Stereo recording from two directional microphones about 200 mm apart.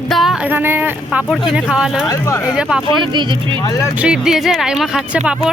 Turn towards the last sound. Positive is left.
turn(degrees=-5)  # may be behind; listen again after turning